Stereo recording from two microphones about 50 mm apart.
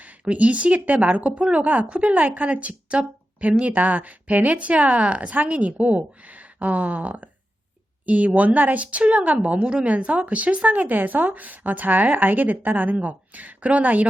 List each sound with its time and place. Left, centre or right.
0.0 s a woman's voice: right